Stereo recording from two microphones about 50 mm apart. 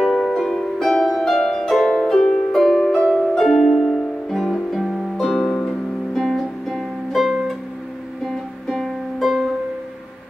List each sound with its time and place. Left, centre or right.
0.0 s harp: centre
1.9 s music: centre